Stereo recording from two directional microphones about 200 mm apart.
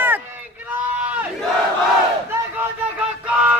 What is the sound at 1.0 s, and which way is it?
Battle cry, 5° right (ahead or behind).